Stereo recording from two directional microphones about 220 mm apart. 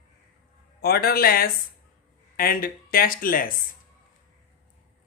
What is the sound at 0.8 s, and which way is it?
A man's voice, 45° left (ahead or behind).